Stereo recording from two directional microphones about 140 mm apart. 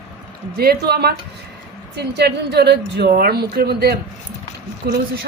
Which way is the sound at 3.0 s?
90° right.